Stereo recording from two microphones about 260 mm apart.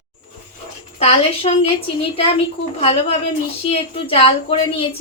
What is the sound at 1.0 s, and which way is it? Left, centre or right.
Speech, left.